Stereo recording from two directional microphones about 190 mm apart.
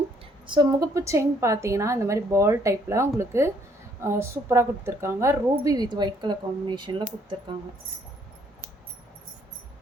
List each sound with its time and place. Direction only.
0.4 s a woman's voice: 25° right (ahead or behind)